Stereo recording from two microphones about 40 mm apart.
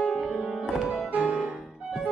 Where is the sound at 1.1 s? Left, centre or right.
Right.